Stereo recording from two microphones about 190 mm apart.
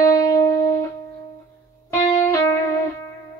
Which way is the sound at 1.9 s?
15° left (ahead or behind).